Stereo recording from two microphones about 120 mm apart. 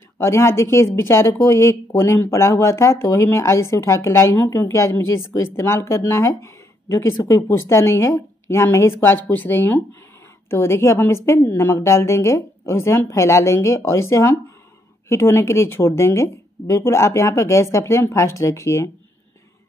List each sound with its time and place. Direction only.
0.2 s speech: 20° left (ahead or behind)